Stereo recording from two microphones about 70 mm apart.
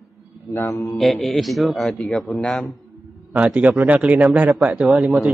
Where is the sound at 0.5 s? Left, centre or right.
Left.